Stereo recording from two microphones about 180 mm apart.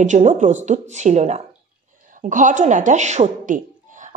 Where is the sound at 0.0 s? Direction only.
45° right (ahead or behind).